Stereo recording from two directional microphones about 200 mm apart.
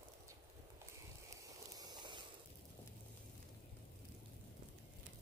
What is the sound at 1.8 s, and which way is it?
Vehicle, 20° right (ahead or behind).